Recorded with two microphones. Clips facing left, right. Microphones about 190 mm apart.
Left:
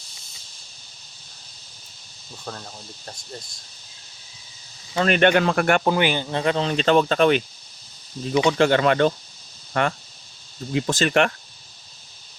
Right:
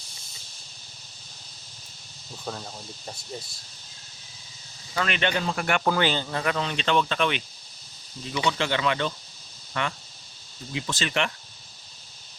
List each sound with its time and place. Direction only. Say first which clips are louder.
2.4 s speech: right 1 dB; 5° right (ahead or behind)
5.0 s speech: left 11 dB; 45° left (ahead or behind)
5.3 s speech: left 8 dB; 70° left (ahead or behind)
5.8 s speech: left 3 dB; 20° left (ahead or behind)
6.4 s speech: left 9 dB; 30° left (ahead or behind)
8.4 s speech: left 7 dB; 50° left (ahead or behind)